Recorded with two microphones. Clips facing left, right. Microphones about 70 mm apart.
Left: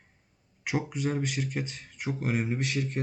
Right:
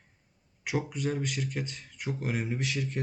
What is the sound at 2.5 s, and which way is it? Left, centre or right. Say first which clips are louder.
Speech: left 2 dB; left.